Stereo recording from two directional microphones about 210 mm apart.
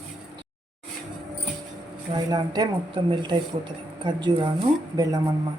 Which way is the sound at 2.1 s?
20° right (ahead or behind).